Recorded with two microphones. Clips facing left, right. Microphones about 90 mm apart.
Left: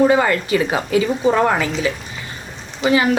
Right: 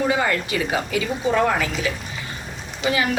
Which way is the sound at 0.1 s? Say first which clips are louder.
Left 6 dB; 45° left (ahead or behind).